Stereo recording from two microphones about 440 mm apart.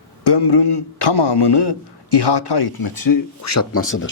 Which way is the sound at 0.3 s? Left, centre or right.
Left.